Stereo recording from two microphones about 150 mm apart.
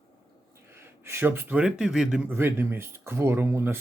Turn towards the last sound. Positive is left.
turn(degrees=-15)  # may be behind; listen again after turning